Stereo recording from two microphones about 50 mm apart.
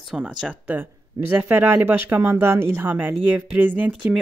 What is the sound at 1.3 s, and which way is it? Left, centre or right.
Speech, right.